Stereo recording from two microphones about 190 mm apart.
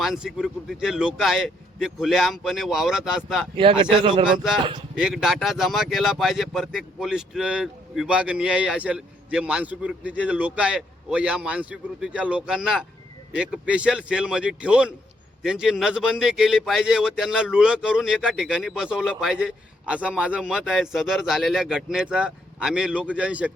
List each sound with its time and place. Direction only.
0.0 s a man's voice: centre (ahead or behind)
3.6 s speech: 30° right (ahead or behind)
4.3 s a man's voice: centre (ahead or behind)